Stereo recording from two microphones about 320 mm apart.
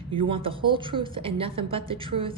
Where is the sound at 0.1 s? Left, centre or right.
Centre.